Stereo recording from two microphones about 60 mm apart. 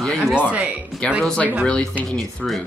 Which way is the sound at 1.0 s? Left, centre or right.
Centre.